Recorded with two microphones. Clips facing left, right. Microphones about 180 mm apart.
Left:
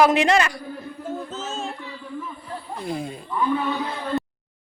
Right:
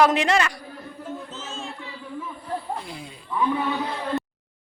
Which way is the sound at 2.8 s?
50° left (ahead or behind).